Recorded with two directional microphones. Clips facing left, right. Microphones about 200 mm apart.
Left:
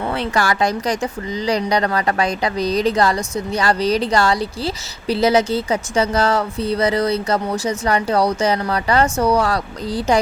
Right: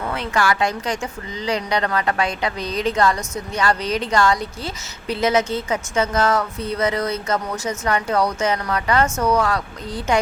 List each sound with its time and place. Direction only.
0.1 s speech: 35° left (ahead or behind)